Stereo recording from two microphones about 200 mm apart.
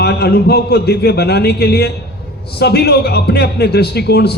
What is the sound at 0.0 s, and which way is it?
A man's voice, 55° left (ahead or behind).